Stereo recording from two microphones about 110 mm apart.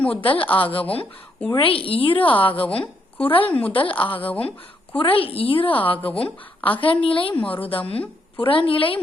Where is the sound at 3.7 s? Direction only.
55° left (ahead or behind).